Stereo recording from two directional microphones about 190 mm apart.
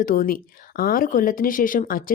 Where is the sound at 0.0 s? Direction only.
45° left (ahead or behind).